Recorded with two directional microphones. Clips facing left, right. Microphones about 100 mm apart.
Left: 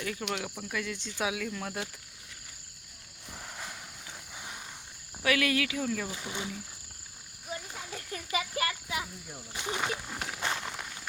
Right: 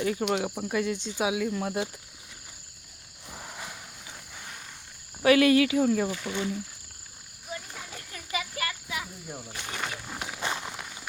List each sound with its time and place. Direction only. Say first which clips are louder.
0.0 s speech: right 8 dB; 30° right (ahead or behind)
0.9 s speech: right 5 dB; 15° right (ahead or behind)
3.3 s cricket: right 2 dB; 10° right (ahead or behind)
5.2 s speech: right 9 dB; 30° right (ahead or behind)
6.1 s speech: right 6 dB; 20° left (ahead or behind)
8.1 s insect: left 1 dB; 30° left (ahead or behind)
9.5 s speech: left 4 dB; 15° left (ahead or behind)
10.1 s walk: right 1 dB; 5° right (ahead or behind)